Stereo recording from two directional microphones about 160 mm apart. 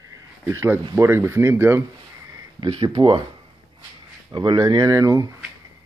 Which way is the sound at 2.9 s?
25° right (ahead or behind).